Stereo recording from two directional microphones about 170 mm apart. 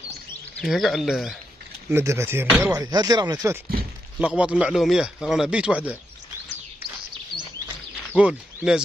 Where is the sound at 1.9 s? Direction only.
15° right (ahead or behind).